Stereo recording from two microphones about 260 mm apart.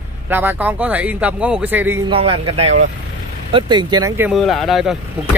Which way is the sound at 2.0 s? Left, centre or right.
Right.